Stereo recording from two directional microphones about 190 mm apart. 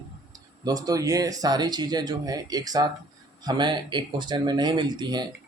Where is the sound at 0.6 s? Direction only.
20° right (ahead or behind).